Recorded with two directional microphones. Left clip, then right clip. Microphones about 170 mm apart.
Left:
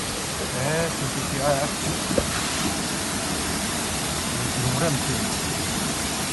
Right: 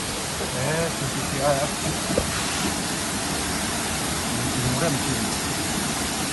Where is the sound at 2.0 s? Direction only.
40° left (ahead or behind).